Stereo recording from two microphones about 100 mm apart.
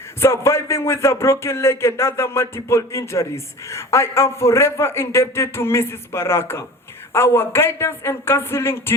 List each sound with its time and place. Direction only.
0.2 s speech: 25° left (ahead or behind)